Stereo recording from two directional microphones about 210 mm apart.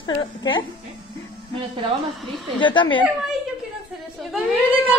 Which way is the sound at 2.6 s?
25° left (ahead or behind).